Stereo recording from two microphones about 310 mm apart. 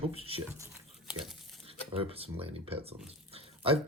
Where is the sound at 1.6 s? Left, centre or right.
Centre.